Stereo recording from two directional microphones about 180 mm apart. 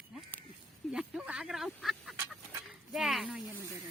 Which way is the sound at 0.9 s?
5° right (ahead or behind).